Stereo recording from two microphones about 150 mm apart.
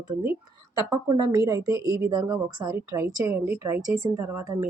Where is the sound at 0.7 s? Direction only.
25° right (ahead or behind).